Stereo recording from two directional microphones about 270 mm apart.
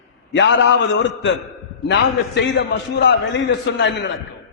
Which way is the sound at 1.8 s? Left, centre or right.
Left.